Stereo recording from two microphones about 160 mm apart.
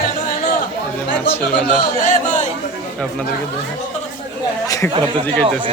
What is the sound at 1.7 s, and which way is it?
Music, 50° left (ahead or behind).